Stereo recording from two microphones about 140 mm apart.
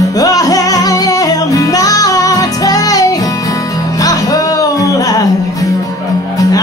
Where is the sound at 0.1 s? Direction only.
25° left (ahead or behind).